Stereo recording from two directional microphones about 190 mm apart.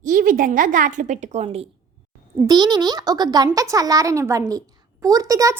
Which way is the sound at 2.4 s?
20° right (ahead or behind).